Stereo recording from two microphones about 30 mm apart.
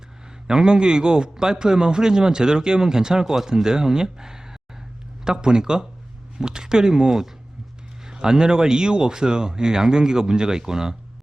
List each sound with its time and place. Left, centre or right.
0.4 s a man's voice: right